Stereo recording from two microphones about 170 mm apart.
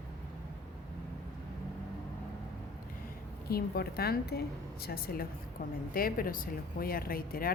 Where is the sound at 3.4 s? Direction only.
65° left (ahead or behind).